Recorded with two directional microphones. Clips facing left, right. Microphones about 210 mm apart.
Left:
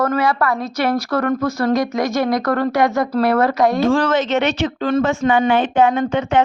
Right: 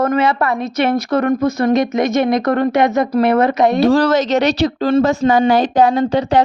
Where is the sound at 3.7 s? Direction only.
40° right (ahead or behind).